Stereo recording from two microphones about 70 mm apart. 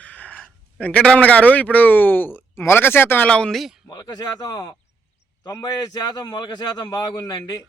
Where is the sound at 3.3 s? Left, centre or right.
Centre.